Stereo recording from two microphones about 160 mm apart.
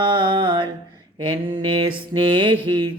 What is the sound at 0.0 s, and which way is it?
Mantra, 30° right (ahead or behind).